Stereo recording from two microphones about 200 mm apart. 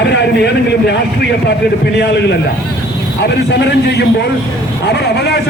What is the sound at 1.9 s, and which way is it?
A man's voice, 55° left (ahead or behind).